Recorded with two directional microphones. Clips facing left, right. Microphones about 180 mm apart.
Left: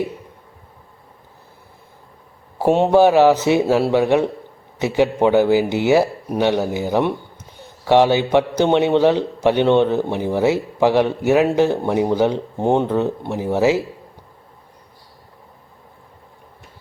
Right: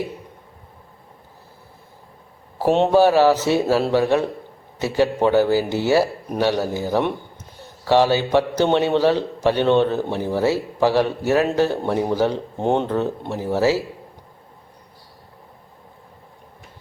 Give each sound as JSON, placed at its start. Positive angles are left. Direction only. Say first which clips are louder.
{"t": 2.6, "sound": "a man's voice", "louder": "left 2 dB", "side_deg": 10}